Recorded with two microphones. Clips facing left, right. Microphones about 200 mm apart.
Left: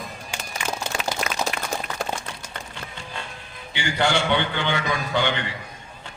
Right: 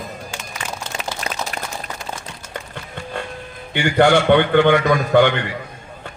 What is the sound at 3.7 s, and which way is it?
A man's voice, 55° right (ahead or behind).